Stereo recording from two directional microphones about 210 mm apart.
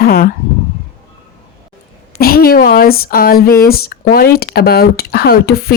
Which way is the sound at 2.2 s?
45° left (ahead or behind).